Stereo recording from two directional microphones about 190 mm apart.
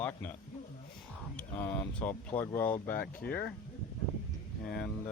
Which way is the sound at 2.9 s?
50° left (ahead or behind).